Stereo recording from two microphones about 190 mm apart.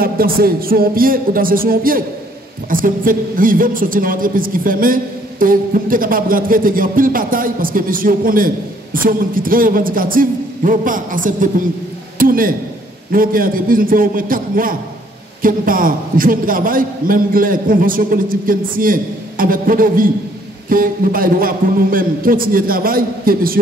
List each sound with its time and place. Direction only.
0.0 s a man's voice: 50° right (ahead or behind)